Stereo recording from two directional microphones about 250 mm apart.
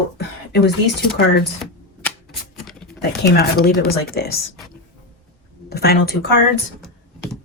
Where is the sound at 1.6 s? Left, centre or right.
Centre.